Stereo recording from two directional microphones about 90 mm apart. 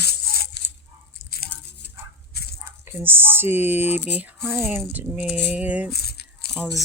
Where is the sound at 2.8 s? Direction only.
25° right (ahead or behind).